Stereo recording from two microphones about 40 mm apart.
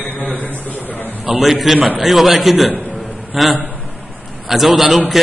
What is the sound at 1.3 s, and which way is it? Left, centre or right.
A man's voice, centre.